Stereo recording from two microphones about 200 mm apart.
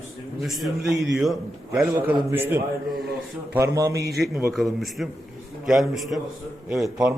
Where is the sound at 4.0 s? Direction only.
50° right (ahead or behind).